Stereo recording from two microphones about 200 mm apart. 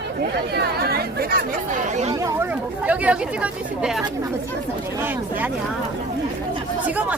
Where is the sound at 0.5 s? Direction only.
50° right (ahead or behind).